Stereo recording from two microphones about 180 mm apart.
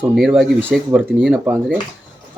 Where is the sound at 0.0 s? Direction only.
5° right (ahead or behind).